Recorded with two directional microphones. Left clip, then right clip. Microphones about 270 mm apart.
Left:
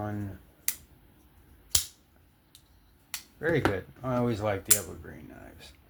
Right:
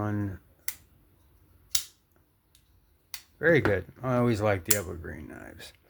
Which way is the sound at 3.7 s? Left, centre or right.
Right.